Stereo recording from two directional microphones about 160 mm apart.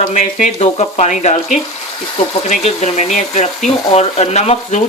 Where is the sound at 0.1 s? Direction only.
45° left (ahead or behind).